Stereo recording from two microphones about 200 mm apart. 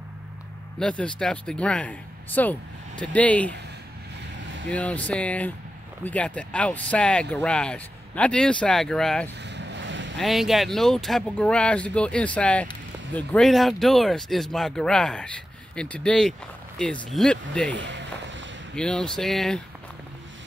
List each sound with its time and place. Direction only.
0.7 s speech: 5° left (ahead or behind)
4.6 s speech: 5° left (ahead or behind)
9.4 s vehicle: 60° right (ahead or behind)
10.1 s speech: centre (ahead or behind)
17.7 s a sound: 65° right (ahead or behind)
18.8 s speech: 5° left (ahead or behind)